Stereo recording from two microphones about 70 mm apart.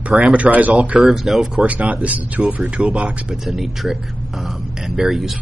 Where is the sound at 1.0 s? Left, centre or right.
Centre.